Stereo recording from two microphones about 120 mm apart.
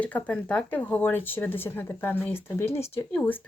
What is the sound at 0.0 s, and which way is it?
Speech, 10° left (ahead or behind).